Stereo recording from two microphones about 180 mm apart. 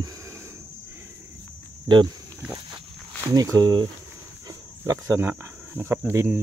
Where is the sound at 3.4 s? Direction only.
20° right (ahead or behind).